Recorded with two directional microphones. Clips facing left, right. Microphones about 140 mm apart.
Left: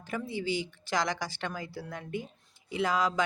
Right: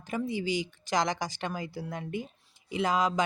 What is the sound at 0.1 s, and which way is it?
Speech, 15° right (ahead or behind).